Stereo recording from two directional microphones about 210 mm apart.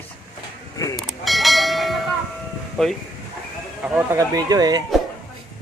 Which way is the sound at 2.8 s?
Centre (ahead or behind).